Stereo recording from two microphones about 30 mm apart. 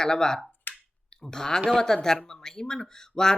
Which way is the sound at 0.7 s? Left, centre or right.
Left.